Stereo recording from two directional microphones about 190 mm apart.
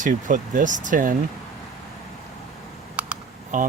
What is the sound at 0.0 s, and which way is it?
Speech, 40° right (ahead or behind).